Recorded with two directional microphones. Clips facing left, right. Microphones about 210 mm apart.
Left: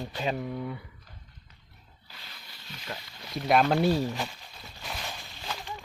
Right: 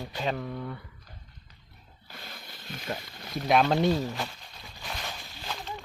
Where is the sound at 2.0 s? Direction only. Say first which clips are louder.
Right 7 dB; 50° right (ahead or behind).